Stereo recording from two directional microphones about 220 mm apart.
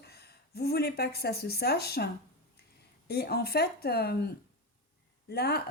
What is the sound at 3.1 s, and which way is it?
Speech, 45° left (ahead or behind).